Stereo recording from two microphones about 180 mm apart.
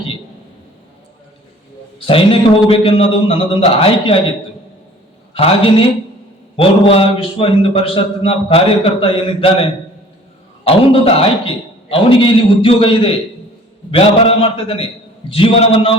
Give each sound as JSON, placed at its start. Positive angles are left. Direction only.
{"t": 2.0, "sound": "a man's voice", "side_deg": 30}
{"t": 5.3, "sound": "a man's voice", "side_deg": 30}